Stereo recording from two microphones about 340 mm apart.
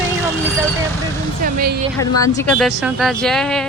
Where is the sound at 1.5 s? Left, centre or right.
Right.